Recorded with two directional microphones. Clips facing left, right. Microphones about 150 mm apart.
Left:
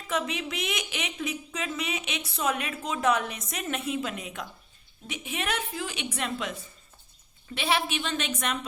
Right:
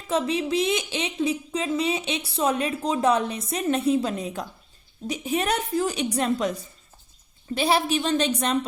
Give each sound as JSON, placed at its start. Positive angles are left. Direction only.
{"t": 0.1, "sound": "speech", "side_deg": -30}